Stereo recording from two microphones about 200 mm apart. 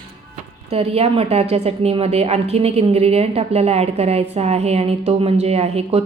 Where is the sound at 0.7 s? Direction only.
30° right (ahead or behind).